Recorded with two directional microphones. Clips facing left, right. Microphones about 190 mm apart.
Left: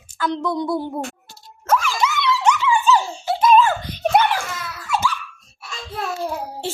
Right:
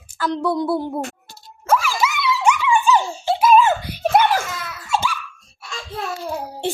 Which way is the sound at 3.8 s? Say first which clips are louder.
Even; 10° right (ahead or behind).